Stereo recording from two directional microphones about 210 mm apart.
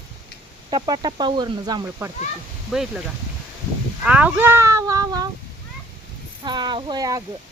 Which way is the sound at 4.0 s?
5° right (ahead or behind).